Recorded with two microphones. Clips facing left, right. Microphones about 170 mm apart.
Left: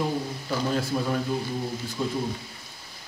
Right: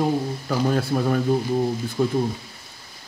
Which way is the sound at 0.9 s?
55° right (ahead or behind).